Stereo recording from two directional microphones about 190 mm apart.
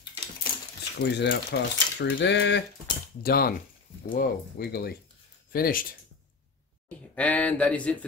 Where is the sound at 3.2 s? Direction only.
50° left (ahead or behind).